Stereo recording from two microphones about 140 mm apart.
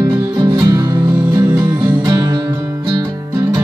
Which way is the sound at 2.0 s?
30° right (ahead or behind).